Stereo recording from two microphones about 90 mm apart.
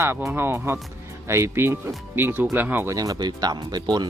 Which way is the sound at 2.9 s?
40° right (ahead or behind).